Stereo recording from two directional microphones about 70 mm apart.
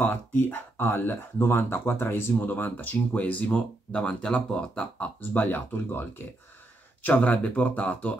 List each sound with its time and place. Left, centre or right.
0.0 s speech: left